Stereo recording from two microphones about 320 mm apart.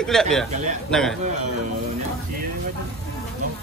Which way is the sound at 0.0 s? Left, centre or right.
Centre.